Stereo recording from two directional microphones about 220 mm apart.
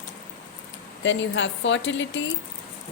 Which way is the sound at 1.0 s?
55° left (ahead or behind).